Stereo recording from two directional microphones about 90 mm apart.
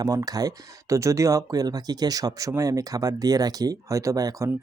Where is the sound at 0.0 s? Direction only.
40° right (ahead or behind).